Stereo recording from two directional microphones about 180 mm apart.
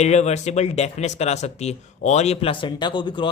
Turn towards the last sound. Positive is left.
turn(degrees=25)  # may be behind; listen again after turning